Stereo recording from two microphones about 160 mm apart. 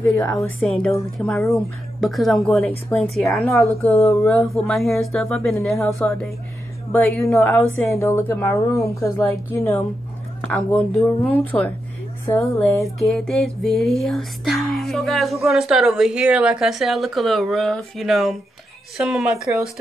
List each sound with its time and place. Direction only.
0.4 s speech: centre (ahead or behind)
3.8 s speech: 15° left (ahead or behind)
4.5 s speech: centre (ahead or behind)
7.9 s speech: 15° left (ahead or behind)
12.8 s speech: centre (ahead or behind)